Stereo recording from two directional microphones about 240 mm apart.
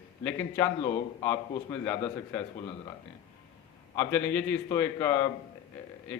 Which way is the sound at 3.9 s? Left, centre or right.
Centre.